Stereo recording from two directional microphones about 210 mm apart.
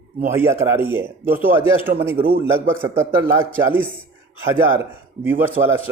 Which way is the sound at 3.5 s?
10° right (ahead or behind).